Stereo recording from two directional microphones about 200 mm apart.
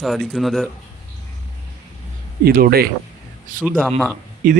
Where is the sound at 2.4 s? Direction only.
50° right (ahead or behind).